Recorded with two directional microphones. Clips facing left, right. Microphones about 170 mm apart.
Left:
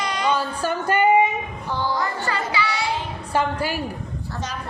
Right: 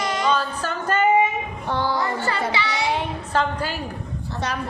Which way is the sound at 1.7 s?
65° right (ahead or behind).